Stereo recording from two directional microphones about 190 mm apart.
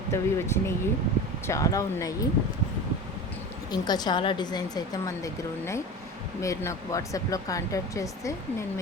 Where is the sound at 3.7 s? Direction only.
20° left (ahead or behind).